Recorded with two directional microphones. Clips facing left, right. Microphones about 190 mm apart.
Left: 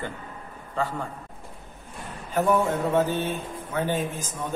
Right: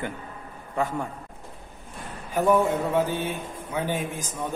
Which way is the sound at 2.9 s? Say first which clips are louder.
Left 1 dB; 10° right (ahead or behind).